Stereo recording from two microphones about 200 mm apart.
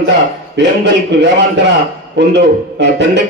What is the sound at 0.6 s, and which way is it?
A man's voice, 60° right (ahead or behind).